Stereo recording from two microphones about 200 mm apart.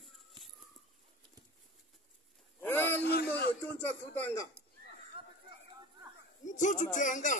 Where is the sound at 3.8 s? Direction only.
10° left (ahead or behind).